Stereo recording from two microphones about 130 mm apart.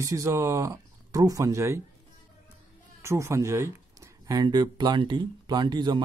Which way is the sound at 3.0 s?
20° right (ahead or behind).